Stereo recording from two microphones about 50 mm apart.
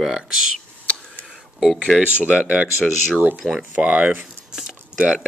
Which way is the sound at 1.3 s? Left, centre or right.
Centre.